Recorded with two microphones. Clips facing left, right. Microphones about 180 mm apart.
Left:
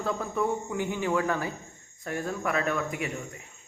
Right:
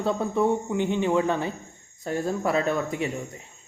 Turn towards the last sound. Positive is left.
turn(degrees=-30)  # may be behind; listen again after turning